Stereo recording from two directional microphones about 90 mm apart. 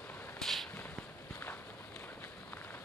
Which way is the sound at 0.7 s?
20° left (ahead or behind).